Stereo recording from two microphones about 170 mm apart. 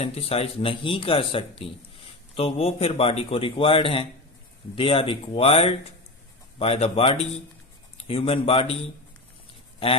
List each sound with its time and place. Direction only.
0.0 s a man's voice: 35° left (ahead or behind)